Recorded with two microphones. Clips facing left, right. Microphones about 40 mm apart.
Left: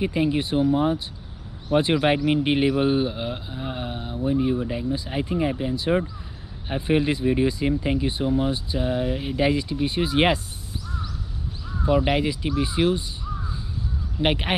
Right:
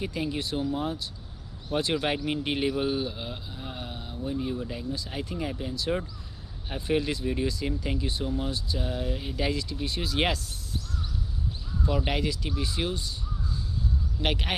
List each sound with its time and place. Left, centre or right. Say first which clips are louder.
0.0 s a man's voice: left 8 dB; left
11.8 s a man's voice: left 7 dB; left
14.2 s a man's voice: left 7 dB; left